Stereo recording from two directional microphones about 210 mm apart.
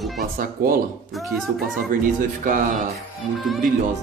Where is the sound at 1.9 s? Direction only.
40° right (ahead or behind).